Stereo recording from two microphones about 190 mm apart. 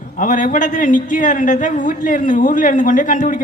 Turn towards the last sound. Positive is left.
turn(degrees=45)  # may be behind; listen again after turning